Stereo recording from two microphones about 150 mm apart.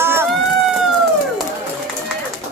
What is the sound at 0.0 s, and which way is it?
Run, 15° right (ahead or behind).